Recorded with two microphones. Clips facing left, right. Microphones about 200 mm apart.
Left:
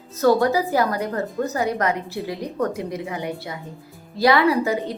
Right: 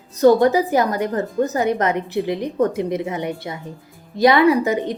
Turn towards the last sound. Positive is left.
turn(degrees=-20)  # may be behind; listen again after turning